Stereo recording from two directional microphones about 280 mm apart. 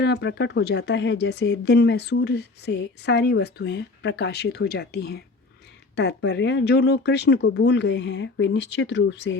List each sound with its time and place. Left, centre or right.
0.0 s speech: left